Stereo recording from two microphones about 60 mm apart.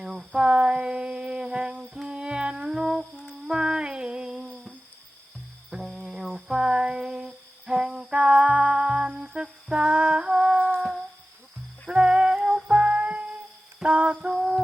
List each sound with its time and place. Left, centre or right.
0.0 s a sound: centre
1.8 s music: centre
5.7 s music: centre
6.3 s female singing: centre
10.8 s music: centre
14.3 s a sound: centre